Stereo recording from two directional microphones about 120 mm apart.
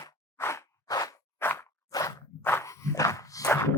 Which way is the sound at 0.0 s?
25° left (ahead or behind).